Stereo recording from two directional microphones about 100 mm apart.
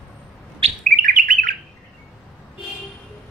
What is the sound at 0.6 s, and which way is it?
Bird, 75° right (ahead or behind).